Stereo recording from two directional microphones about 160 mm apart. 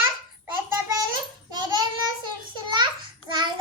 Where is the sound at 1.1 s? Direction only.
25° right (ahead or behind).